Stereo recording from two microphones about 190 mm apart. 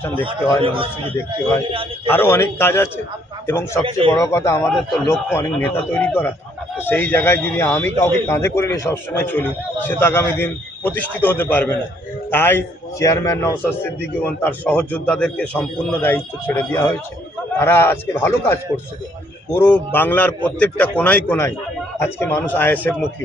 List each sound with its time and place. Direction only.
0.1 s a man's voice: 25° right (ahead or behind)
2.0 s speech: 10° left (ahead or behind)
3.8 s a man's voice: 30° right (ahead or behind)
4.1 s speech: 15° left (ahead or behind)